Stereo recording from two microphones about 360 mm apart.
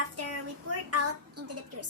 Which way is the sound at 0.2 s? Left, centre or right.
Right.